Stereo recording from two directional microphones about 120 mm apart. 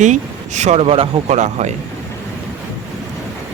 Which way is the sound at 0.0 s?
85° right.